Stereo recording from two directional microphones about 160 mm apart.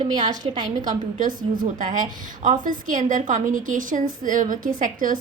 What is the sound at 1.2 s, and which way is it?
A woman's voice, 60° right (ahead or behind).